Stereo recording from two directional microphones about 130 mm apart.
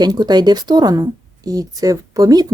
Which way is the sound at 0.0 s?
30° right (ahead or behind).